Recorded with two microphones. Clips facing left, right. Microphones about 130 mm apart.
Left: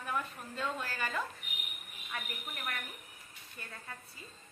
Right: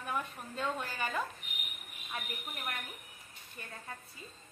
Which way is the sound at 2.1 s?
25° right (ahead or behind).